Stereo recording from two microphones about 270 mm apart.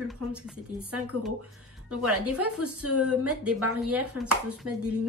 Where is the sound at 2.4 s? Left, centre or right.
Right.